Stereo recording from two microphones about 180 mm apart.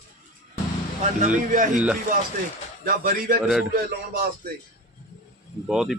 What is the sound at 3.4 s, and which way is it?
Speech, 5° right (ahead or behind).